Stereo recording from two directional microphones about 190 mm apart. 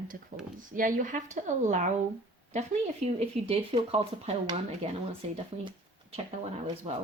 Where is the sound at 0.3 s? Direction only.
40° right (ahead or behind).